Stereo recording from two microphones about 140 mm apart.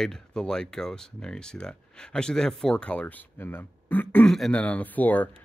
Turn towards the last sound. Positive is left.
turn(degrees=10)  # may be behind; listen again after turning